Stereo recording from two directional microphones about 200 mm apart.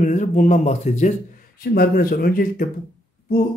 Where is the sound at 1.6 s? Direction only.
50° left (ahead or behind).